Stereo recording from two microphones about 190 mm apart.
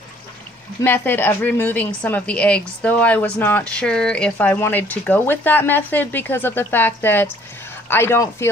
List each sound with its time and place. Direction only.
0.8 s a woman's voice: 10° left (ahead or behind)